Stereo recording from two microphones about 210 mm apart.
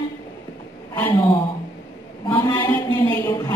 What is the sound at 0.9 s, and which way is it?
Speech, 15° left (ahead or behind).